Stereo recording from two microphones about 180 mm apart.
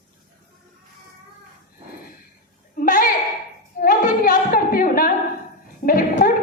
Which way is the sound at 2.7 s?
50° left (ahead or behind).